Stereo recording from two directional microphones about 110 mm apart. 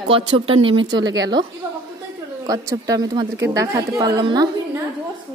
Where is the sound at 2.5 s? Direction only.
35° right (ahead or behind).